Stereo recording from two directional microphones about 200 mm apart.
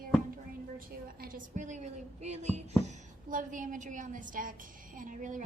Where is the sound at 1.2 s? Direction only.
40° right (ahead or behind).